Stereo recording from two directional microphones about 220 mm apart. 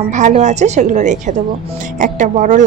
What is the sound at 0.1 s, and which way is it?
A woman's voice, 30° right (ahead or behind).